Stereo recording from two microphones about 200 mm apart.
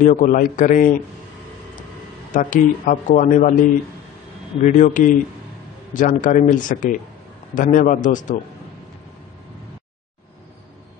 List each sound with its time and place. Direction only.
0.0 s speech: 40° left (ahead or behind)
2.3 s speech: 40° left (ahead or behind)
4.6 s speech: 40° left (ahead or behind)